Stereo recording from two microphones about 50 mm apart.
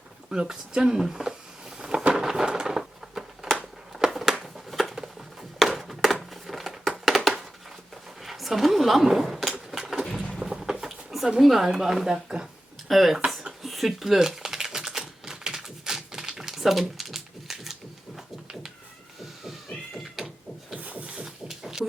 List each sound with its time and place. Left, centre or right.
0.3 s speech: centre
1.8 s a sound: centre
8.2 s speech: centre
9.7 s a sound: centre
11.3 s speech: centre
12.9 s speech: centre
13.6 s typing: centre
19.2 s cat: centre
20.7 s a sound: right
21.2 s music: centre